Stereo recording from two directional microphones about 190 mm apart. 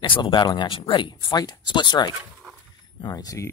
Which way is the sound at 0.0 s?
25° left (ahead or behind).